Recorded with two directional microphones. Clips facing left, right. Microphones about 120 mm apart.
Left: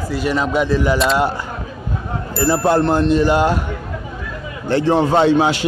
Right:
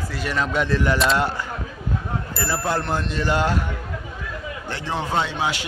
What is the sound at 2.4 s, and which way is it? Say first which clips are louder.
Speech: left 10 dB; 20° left (ahead or behind).